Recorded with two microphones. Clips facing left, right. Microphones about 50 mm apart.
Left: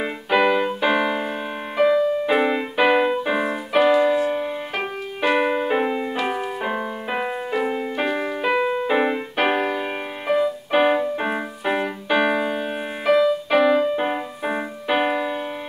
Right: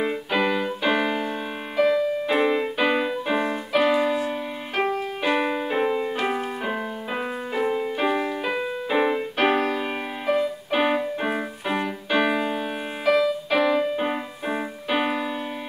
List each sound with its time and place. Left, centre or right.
0.0 s music: centre
3.9 s keyboard: centre
4.2 s music: centre
7.1 s music: centre
8.6 s music: left
8.9 s music: centre